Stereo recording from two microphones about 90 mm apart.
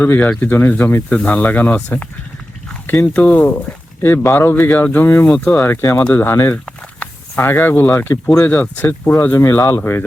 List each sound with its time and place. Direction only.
0.0 s speech: 20° left (ahead or behind)
5.3 s speech: 15° left (ahead or behind)
5.6 s speech: 30° left (ahead or behind)
6.5 s a sound: 15° left (ahead or behind)
8.3 s speech: 10° left (ahead or behind)